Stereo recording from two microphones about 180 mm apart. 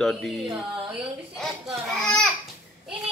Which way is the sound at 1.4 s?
Centre (ahead or behind).